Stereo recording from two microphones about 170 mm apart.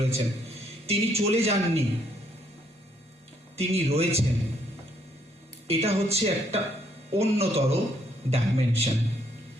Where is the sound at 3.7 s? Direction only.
35° right (ahead or behind).